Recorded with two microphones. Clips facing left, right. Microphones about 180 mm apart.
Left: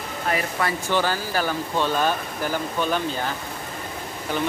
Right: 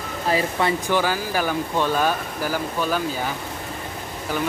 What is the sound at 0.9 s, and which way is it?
Speech, 10° right (ahead or behind).